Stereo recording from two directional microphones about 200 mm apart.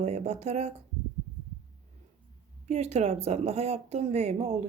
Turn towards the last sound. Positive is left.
turn(degrees=-35)  # may be behind; listen again after turning